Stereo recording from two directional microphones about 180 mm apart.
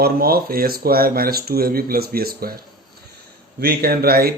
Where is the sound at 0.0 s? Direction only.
55° right (ahead or behind).